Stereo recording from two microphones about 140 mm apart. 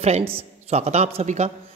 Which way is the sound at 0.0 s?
45° right (ahead or behind).